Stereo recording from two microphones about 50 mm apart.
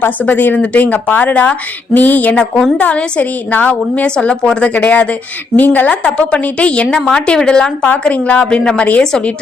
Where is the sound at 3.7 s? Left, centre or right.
Left.